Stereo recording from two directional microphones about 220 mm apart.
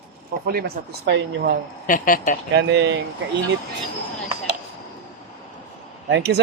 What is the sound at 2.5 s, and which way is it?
Speech, 50° right (ahead or behind).